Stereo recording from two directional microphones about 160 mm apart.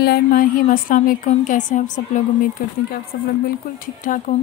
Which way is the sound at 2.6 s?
65° left (ahead or behind).